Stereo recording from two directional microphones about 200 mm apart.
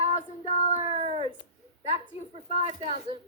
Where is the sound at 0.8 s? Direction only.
30° right (ahead or behind).